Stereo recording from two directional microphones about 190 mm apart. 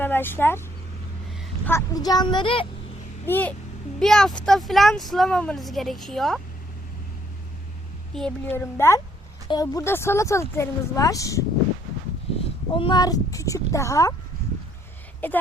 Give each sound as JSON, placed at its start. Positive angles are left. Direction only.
{"t": 0.0, "sound": "speech", "side_deg": 10}
{"t": 1.6, "sound": "a woman's voice", "side_deg": 15}
{"t": 3.2, "sound": "a woman's voice", "side_deg": 10}
{"t": 8.1, "sound": "speech", "side_deg": 5}
{"t": 12.4, "sound": "speech", "side_deg": 25}
{"t": 15.2, "sound": "a woman's voice", "side_deg": 10}